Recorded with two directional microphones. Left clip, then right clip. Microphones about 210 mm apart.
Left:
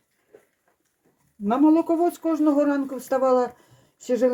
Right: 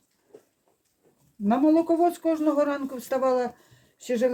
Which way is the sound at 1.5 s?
45° left (ahead or behind).